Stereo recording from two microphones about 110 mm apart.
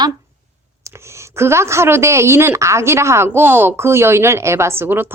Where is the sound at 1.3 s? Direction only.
25° right (ahead or behind).